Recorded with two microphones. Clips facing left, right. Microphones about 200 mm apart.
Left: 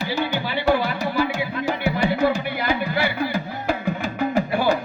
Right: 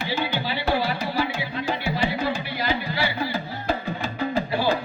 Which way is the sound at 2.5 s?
55° left (ahead or behind).